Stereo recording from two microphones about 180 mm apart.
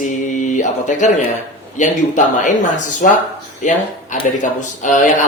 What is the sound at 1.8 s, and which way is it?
Speech, 45° left (ahead or behind).